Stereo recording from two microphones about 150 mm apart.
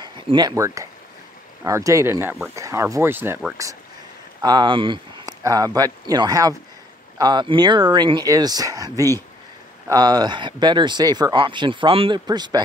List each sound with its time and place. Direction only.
0.0 s speech: 30° right (ahead or behind)
4.4 s speech: 30° right (ahead or behind)